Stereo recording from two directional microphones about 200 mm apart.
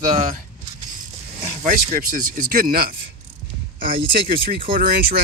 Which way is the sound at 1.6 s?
40° right (ahead or behind).